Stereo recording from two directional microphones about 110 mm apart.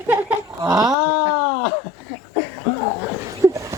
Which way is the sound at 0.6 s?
35° right (ahead or behind).